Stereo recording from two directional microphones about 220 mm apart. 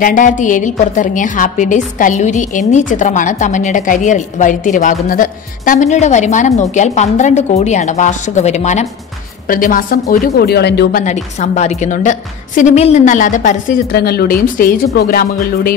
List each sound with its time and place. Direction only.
0.0 s a woman's voice: 35° left (ahead or behind)